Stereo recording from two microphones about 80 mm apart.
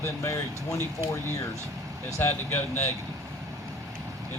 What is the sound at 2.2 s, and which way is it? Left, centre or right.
Speech, left.